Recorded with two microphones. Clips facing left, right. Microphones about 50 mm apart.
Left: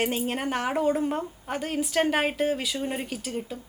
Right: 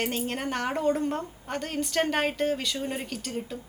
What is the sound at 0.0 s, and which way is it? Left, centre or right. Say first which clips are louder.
Speech: left 3 dB; centre.